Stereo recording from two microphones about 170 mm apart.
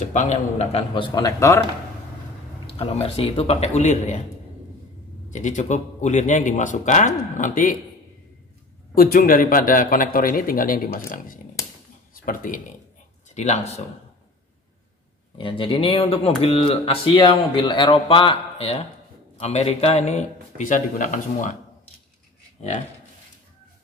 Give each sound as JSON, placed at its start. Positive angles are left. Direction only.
{"t": 0.0, "sound": "speech", "side_deg": 45}
{"t": 1.1, "sound": "speech", "side_deg": 20}
{"t": 2.6, "sound": "speech", "side_deg": 35}
{"t": 5.3, "sound": "speech", "side_deg": 45}
{"t": 8.9, "sound": "a man's voice", "side_deg": 60}
{"t": 13.3, "sound": "speech", "side_deg": 40}
{"t": 15.3, "sound": "speech", "side_deg": 30}
{"t": 22.6, "sound": "speech", "side_deg": 40}